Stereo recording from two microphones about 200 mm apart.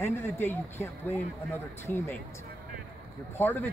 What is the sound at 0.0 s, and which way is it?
Speech, 10° left (ahead or behind).